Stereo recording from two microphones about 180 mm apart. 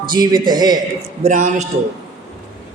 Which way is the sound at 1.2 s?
45° right (ahead or behind).